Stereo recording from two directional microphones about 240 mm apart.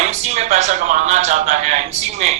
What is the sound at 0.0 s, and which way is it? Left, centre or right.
A man's voice, right.